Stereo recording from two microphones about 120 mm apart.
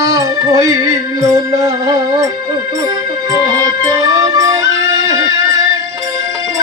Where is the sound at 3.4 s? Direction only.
30° right (ahead or behind).